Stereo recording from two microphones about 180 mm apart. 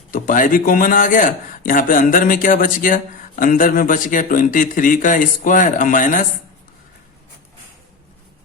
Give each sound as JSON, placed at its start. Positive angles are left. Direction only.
{"t": 0.1, "sound": "speech", "side_deg": 50}